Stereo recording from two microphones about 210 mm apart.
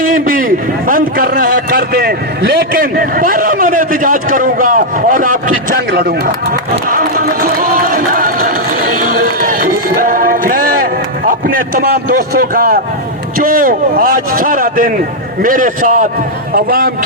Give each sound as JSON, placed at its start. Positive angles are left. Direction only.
{"t": 0.1, "sound": "a man's voice", "side_deg": -40}
{"t": 5.9, "sound": "run", "side_deg": -45}
{"t": 11.3, "sound": "a man's voice", "side_deg": -40}